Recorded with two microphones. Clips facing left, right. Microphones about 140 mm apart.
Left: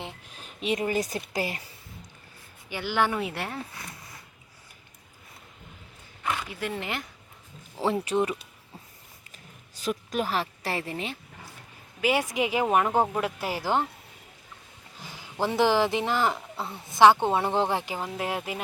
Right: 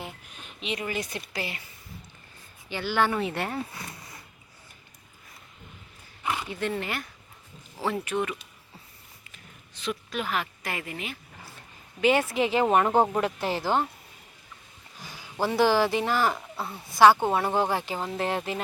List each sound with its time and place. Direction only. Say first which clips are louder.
0.0 s speech: even; 35° left (ahead or behind)
2.6 s speech: right 1 dB; 15° left (ahead or behind)
6.5 s speech: right 2 dB; 10° left (ahead or behind)
8.0 s speech: left 3 dB; 30° left (ahead or behind)
11.9 s speech: right 3 dB; 10° left (ahead or behind)
12.6 s speech: right 2 dB; centre (ahead or behind)
14.9 s a woman's voice: even; 20° left (ahead or behind)